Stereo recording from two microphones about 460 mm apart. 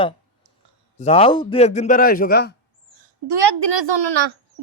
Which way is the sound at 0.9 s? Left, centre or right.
Centre.